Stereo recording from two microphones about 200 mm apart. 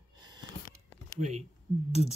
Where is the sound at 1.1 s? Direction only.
35° right (ahead or behind).